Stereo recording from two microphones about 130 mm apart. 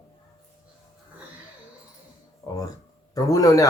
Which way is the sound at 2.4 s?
25° left (ahead or behind).